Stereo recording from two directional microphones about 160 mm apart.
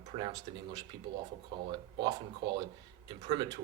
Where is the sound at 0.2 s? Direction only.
25° right (ahead or behind).